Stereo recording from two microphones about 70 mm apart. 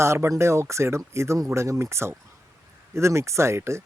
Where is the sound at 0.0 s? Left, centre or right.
Right.